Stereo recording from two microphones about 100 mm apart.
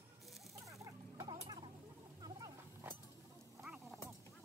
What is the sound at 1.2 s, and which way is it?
Chicken, 50° right (ahead or behind).